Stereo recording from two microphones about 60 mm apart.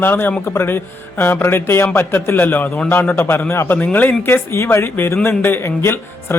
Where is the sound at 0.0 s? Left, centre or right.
Left.